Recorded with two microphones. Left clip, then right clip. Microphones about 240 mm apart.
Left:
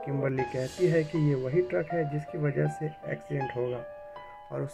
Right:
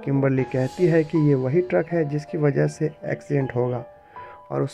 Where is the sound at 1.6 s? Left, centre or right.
Right.